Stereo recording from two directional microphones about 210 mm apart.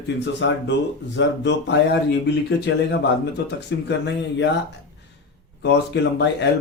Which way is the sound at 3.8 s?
55° left (ahead or behind).